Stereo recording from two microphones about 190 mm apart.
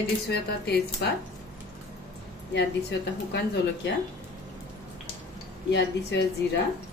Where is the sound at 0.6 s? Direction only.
60° left (ahead or behind).